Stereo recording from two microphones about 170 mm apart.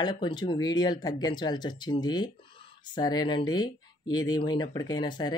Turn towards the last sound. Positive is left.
turn(degrees=25)  # may be behind; listen again after turning